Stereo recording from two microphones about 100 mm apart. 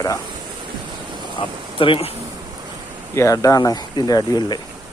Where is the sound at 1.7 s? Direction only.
60° left (ahead or behind).